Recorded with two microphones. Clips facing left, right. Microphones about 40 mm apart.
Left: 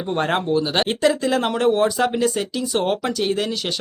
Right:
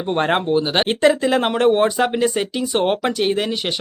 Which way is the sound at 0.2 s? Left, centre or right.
Right.